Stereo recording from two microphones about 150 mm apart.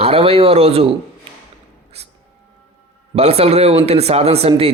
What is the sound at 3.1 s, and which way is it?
Speech, 40° right (ahead or behind).